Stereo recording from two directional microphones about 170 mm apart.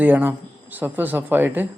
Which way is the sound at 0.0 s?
10° right (ahead or behind).